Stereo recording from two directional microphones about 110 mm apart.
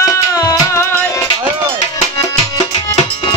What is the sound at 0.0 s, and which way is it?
Music, 30° left (ahead or behind).